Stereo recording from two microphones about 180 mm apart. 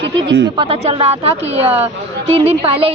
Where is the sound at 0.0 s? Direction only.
70° right (ahead or behind).